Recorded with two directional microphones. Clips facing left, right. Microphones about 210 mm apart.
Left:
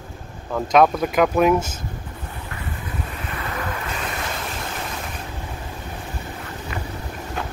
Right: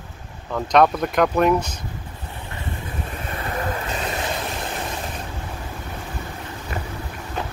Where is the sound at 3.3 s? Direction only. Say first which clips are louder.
Right 3 dB; 35° right (ahead or behind).